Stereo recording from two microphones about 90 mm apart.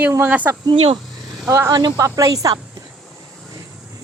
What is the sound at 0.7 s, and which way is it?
Speech, 80° right.